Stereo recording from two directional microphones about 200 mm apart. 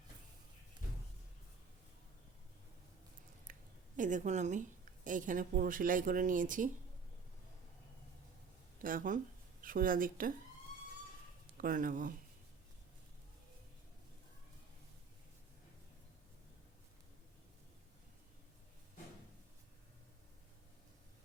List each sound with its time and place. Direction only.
3.5 s a sound: 45° right (ahead or behind)
3.9 s speech: 40° right (ahead or behind)
8.8 s speech: 45° right (ahead or behind)
11.5 s speech: 45° right (ahead or behind)